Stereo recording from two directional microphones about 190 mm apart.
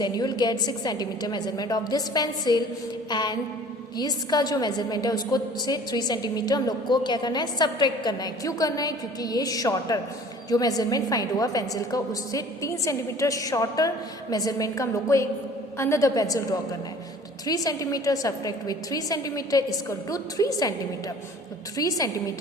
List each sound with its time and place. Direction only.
0.0 s a woman's voice: 20° left (ahead or behind)
21.8 s a woman's voice: 20° left (ahead or behind)